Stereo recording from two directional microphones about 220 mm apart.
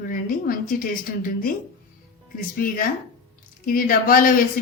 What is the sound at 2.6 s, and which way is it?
Speech, 40° left (ahead or behind).